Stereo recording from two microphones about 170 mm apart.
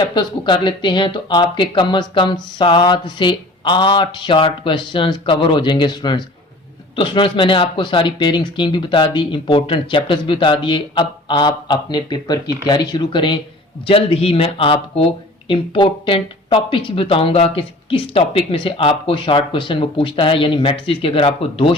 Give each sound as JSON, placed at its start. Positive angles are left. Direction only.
{"t": 0.0, "sound": "speech", "side_deg": 25}